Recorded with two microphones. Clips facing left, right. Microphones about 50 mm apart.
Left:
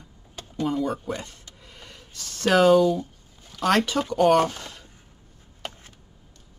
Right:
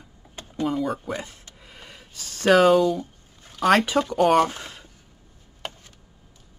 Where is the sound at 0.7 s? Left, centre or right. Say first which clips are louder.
Even; centre.